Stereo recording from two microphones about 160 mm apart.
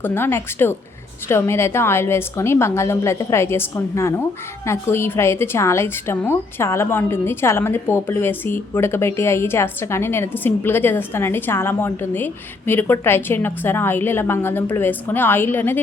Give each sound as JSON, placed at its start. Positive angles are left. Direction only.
{"t": 0.0, "sound": "a woman's voice", "side_deg": 15}